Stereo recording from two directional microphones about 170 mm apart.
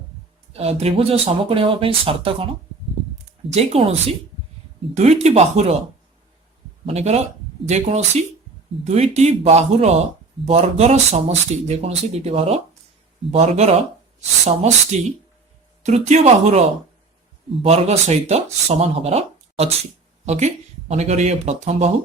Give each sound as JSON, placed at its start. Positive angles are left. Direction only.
{"t": 0.5, "sound": "speech", "side_deg": -35}
{"t": 4.9, "sound": "speech", "side_deg": -40}
{"t": 6.8, "sound": "speech", "side_deg": -40}
{"t": 14.9, "sound": "speech", "side_deg": -40}